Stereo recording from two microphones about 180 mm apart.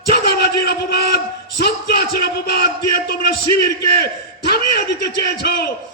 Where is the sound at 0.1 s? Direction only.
60° left (ahead or behind).